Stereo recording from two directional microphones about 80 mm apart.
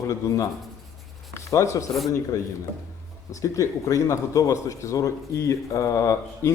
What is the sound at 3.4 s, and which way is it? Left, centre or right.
A man's voice, left.